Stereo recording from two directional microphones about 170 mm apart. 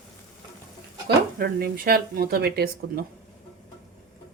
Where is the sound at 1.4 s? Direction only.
60° right (ahead or behind).